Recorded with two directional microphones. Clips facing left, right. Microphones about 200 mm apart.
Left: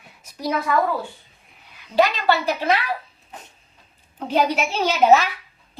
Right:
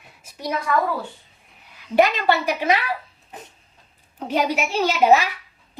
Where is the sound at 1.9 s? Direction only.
15° right (ahead or behind).